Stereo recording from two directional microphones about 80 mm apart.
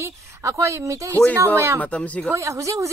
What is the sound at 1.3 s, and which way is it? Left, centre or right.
A woman's voice, right.